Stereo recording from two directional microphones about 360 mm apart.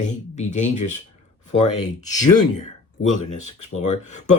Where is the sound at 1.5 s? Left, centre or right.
Left.